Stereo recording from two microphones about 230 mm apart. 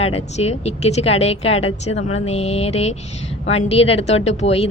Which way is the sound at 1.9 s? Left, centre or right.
Left.